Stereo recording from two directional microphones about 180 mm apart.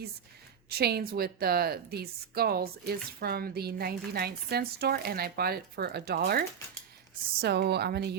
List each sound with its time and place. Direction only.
0.7 s a woman's voice: 60° right (ahead or behind)
7.4 s a woman's voice: 65° right (ahead or behind)